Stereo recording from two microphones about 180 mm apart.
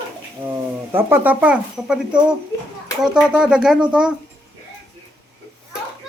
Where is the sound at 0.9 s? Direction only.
10° right (ahead or behind).